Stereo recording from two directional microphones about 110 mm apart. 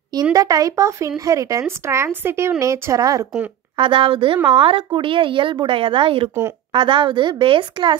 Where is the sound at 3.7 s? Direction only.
50° right (ahead or behind).